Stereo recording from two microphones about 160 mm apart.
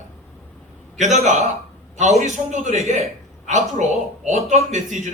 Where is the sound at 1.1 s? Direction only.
40° right (ahead or behind).